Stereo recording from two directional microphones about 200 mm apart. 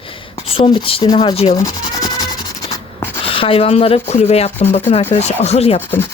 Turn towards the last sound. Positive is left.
turn(degrees=30)  # may be behind; listen again after turning